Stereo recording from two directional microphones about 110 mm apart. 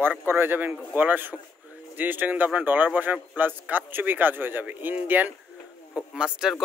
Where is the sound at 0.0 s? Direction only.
15° right (ahead or behind).